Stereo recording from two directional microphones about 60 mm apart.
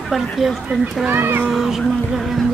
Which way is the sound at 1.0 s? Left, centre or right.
Right.